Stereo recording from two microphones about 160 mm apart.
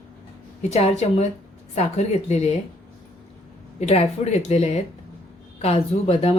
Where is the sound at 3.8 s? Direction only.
40° left (ahead or behind).